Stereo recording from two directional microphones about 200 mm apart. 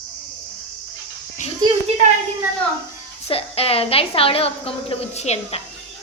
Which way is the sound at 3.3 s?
30° left (ahead or behind).